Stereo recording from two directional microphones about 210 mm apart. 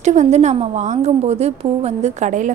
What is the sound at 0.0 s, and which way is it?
A woman's voice, 35° right (ahead or behind).